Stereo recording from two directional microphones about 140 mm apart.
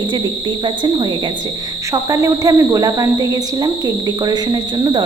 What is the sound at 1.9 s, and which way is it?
A woman's voice, 25° right (ahead or behind).